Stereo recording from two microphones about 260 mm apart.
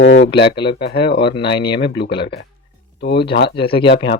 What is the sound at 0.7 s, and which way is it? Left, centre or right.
Speech, left.